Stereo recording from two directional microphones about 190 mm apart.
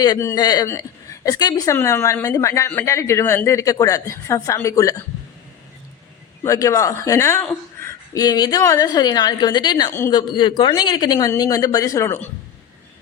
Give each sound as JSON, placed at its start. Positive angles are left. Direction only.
{"t": 0.0, "sound": "a woman's voice", "side_deg": 15}
{"t": 6.4, "sound": "a woman's voice", "side_deg": 15}